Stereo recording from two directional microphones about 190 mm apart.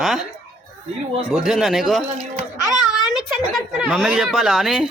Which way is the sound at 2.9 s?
Centre (ahead or behind).